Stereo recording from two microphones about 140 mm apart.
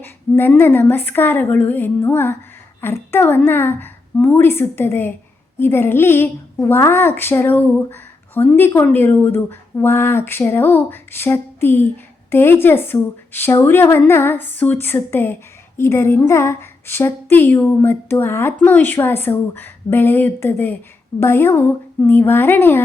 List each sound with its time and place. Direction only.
0.0 s a woman's voice: 15° left (ahead or behind)